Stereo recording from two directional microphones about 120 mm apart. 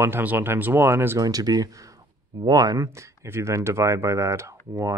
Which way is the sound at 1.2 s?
30° right (ahead or behind).